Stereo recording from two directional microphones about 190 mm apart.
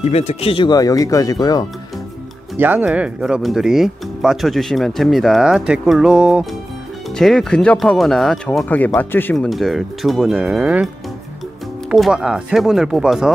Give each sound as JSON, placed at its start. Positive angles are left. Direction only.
{"t": 0.0, "sound": "speech", "side_deg": 35}
{"t": 2.6, "sound": "speech", "side_deg": -10}
{"t": 11.9, "sound": "speech", "side_deg": -5}